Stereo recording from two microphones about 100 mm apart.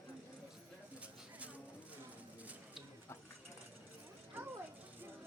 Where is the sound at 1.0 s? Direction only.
15° right (ahead or behind).